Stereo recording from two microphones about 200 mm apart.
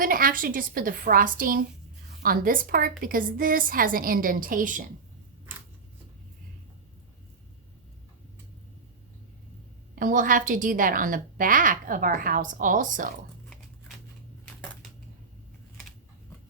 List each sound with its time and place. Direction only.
0.0 s a woman's voice: 45° right (ahead or behind)
9.9 s a woman's voice: 40° right (ahead or behind)